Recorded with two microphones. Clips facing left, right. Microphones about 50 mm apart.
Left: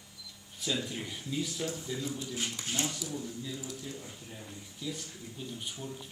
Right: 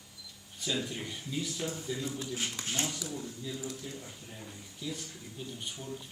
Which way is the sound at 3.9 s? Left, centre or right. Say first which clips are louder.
Even; centre.